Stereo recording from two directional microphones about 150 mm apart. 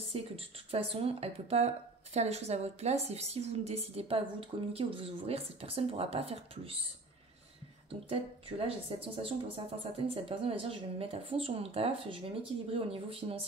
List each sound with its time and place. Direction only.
0.1 s a woman's voice: 40° right (ahead or behind)
8.1 s speech: 40° right (ahead or behind)